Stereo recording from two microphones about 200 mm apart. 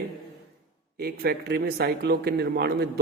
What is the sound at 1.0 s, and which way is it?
A man's voice, 50° right (ahead or behind).